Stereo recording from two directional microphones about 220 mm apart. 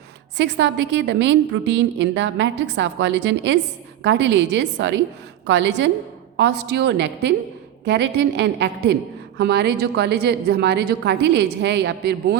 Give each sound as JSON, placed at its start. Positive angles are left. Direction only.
{"t": 0.3, "sound": "a woman's voice", "side_deg": -55}